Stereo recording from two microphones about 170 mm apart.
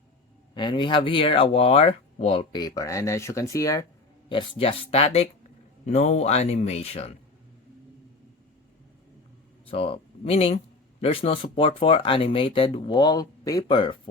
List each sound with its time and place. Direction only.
0.5 s speech: 25° left (ahead or behind)
4.3 s speech: 30° left (ahead or behind)
9.6 s speech: 35° left (ahead or behind)